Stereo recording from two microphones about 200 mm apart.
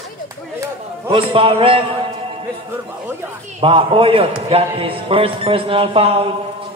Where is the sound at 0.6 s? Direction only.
25° right (ahead or behind).